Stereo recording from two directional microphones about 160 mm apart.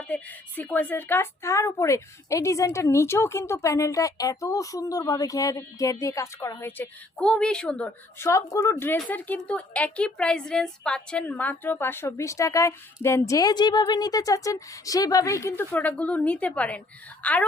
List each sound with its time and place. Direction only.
0.1 s a woman's voice: 10° left (ahead or behind)
8.2 s a woman's voice: 20° left (ahead or behind)